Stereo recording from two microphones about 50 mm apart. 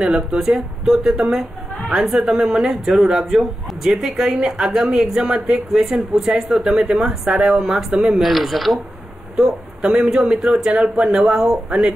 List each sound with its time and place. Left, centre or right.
0.0 s speech: centre
0.4 s speech: centre
9.4 s speech: centre